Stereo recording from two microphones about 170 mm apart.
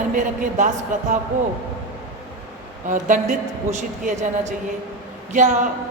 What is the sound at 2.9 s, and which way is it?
A woman's voice, 50° right (ahead or behind).